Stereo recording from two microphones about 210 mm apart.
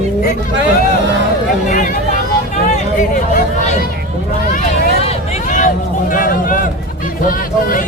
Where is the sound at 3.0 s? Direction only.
40° left (ahead or behind).